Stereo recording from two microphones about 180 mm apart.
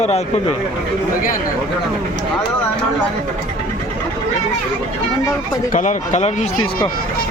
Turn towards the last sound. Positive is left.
turn(degrees=40)  # may be behind; listen again after turning